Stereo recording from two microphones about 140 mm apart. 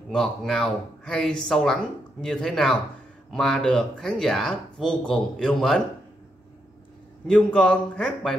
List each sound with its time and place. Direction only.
0.1 s speech: 5° left (ahead or behind)
7.2 s speech: 5° left (ahead or behind)